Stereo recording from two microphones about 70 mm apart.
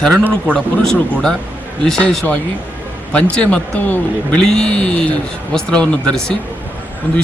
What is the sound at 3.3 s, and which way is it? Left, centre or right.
A man's voice, centre.